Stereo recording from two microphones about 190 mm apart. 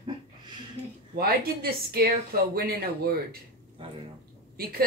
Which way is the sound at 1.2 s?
55° right (ahead or behind).